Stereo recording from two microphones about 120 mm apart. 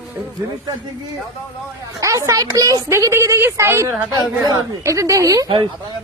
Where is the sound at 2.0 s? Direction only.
25° right (ahead or behind).